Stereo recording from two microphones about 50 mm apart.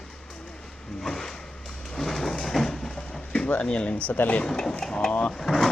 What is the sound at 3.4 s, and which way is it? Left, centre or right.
Speech, left.